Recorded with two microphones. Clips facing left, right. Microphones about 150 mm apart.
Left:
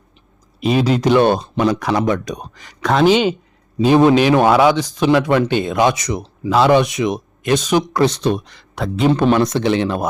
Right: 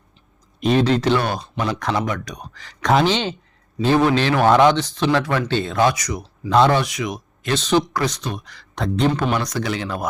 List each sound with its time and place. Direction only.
0.6 s speech: 5° left (ahead or behind)
1.2 s speech: 25° left (ahead or behind)
1.8 s speech: 10° left (ahead or behind)
2.8 s speech: centre (ahead or behind)
3.1 s speech: 10° left (ahead or behind)
7.5 s speech: 15° left (ahead or behind)
7.9 s speech: 30° left (ahead or behind)
8.7 s a man's voice: 5° left (ahead or behind)
9.1 s speech: 25° left (ahead or behind)